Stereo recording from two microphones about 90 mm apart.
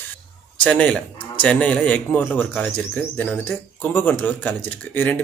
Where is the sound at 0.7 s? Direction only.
15° left (ahead or behind).